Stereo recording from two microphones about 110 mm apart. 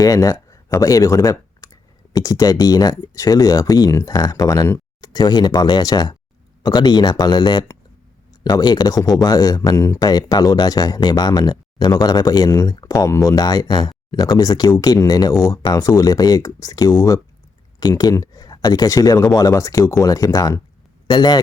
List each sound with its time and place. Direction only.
0.0 s speech: 30° left (ahead or behind)